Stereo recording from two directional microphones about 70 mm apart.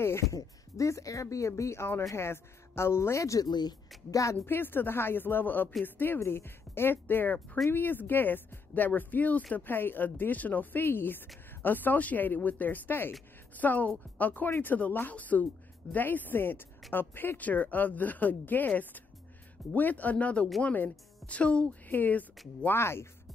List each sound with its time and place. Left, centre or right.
0.0 s speech: left
3.4 s speech: left
4.1 s speech: left
4.5 s speech: left
22.7 s speech: left